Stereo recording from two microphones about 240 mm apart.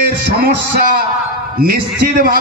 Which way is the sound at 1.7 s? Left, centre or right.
Right.